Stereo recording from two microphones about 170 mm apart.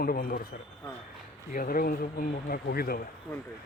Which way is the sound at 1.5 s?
55° left (ahead or behind).